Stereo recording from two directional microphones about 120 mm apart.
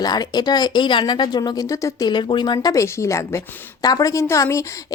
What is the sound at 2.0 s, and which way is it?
Speech, 40° left (ahead or behind).